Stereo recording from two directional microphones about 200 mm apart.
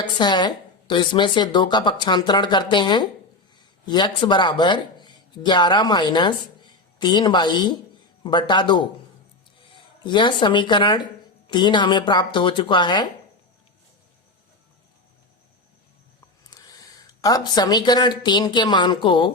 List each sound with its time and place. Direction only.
0.0 s a woman's voice: 20° left (ahead or behind)
16.5 s speech: 20° left (ahead or behind)